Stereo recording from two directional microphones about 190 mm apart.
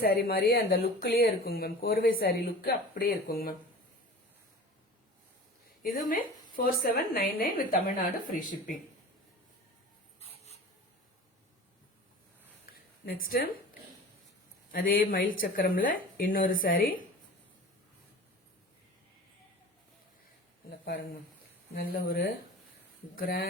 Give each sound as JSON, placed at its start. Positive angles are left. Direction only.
{"t": 0.0, "sound": "speech", "side_deg": 55}
{"t": 5.8, "sound": "speech", "side_deg": 45}
{"t": 10.2, "sound": "writing", "side_deg": 35}
{"t": 13.2, "sound": "speech", "side_deg": 50}
{"t": 14.7, "sound": "speech", "side_deg": 45}
{"t": 20.7, "sound": "a sound", "side_deg": 55}
{"t": 21.8, "sound": "speech", "side_deg": 50}